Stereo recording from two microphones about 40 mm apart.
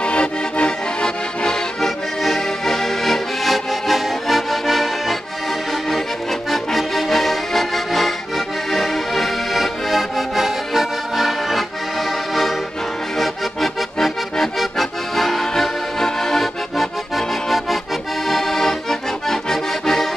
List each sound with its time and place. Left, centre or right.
0.0 s accordion: left
1.8 s accordion: centre
6.5 s accordion: centre
13.2 s accordion: centre
18.3 s accordion: centre